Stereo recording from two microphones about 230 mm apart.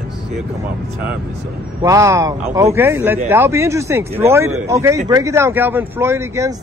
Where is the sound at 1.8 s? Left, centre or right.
Centre.